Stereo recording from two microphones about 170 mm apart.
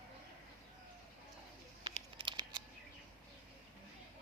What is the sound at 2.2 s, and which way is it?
Scissors, 30° right (ahead or behind).